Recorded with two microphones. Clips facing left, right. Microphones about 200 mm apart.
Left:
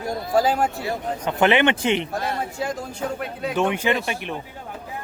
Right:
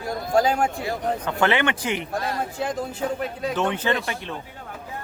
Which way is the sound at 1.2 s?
20° left (ahead or behind).